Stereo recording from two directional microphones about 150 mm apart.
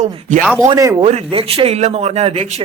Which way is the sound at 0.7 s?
20° right (ahead or behind).